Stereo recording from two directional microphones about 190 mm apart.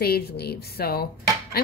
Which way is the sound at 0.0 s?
55° left (ahead or behind).